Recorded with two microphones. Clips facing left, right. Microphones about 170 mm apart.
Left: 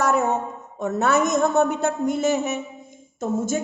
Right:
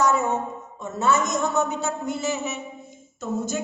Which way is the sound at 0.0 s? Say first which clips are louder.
Left 1 dB; 60° left (ahead or behind).